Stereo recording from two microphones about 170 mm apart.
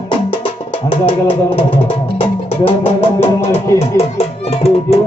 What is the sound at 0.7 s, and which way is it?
Music, 35° left (ahead or behind).